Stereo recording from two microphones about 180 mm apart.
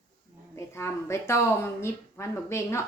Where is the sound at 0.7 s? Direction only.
15° left (ahead or behind).